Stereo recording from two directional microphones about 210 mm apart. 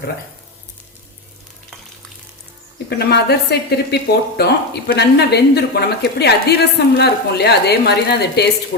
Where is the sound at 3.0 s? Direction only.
50° left (ahead or behind).